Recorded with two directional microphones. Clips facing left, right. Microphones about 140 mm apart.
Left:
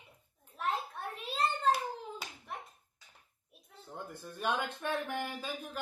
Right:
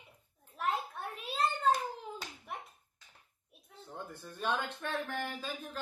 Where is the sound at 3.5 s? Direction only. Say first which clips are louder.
Right 1 dB; centre (ahead or behind).